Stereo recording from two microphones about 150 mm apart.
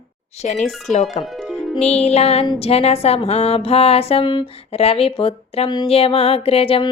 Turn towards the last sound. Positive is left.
turn(degrees=40)  # may be behind; listen again after turning